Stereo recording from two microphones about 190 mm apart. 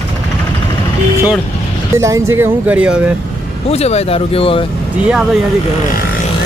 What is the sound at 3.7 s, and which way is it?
Speech, 35° left (ahead or behind).